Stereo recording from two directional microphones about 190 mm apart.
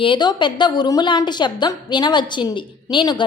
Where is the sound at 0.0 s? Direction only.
25° left (ahead or behind).